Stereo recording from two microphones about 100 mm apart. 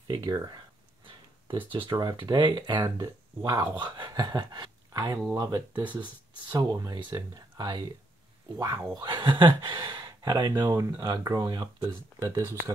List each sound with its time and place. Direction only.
0.1 s speech: 45° right (ahead or behind)
1.7 s speech: 55° right (ahead or behind); by 5.6 s 35° right (ahead or behind)
5.9 s speech: 50° right (ahead or behind)
9.0 s speech: 50° right (ahead or behind)
11.8 s speech: 25° right (ahead or behind)
12.4 s speech: 35° right (ahead or behind)